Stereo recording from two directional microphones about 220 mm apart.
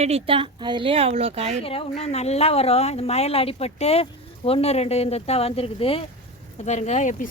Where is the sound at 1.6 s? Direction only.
25° left (ahead or behind).